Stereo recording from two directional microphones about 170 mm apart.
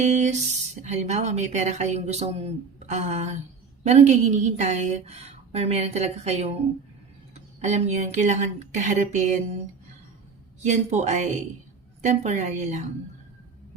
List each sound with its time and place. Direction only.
0.0 s a woman's voice: 45° right (ahead or behind)
7.6 s speech: 40° right (ahead or behind)
10.6 s speech: 45° right (ahead or behind)